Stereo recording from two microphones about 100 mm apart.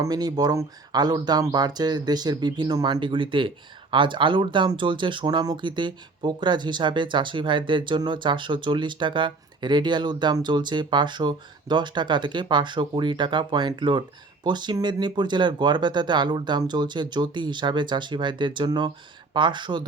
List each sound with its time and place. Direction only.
0.0 s speech: 40° right (ahead or behind)